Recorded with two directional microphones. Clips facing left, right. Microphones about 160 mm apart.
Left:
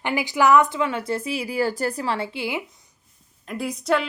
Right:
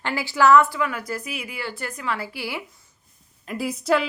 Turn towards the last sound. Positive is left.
turn(degrees=0)  # may be behind; listen again after turning